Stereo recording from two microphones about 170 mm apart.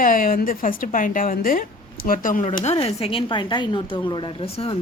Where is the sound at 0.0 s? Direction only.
55° left (ahead or behind).